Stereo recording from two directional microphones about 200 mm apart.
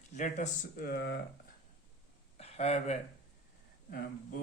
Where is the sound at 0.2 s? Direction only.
40° left (ahead or behind); by 1.2 s 55° left (ahead or behind).